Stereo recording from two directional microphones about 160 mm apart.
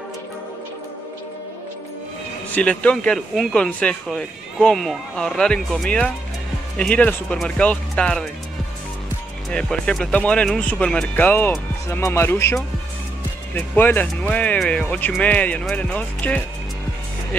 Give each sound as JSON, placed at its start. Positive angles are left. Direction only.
{"t": 2.5, "sound": "speech", "side_deg": 10}
{"t": 9.5, "sound": "speech", "side_deg": 5}
{"t": 13.6, "sound": "speech", "side_deg": 10}